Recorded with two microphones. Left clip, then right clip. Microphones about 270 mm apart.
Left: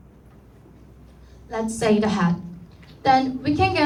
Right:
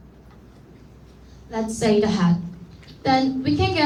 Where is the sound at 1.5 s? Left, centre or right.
Centre.